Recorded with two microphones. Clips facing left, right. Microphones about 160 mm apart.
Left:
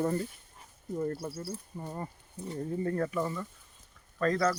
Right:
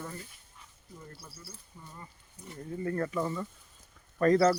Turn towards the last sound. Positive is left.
turn(degrees=-30)  # may be behind; listen again after turning